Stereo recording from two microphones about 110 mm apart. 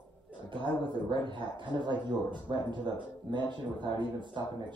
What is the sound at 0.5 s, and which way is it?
Speech, 50° right (ahead or behind).